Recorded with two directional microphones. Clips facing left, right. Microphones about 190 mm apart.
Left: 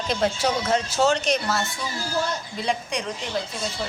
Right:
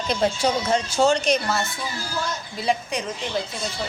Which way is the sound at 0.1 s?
Centre (ahead or behind).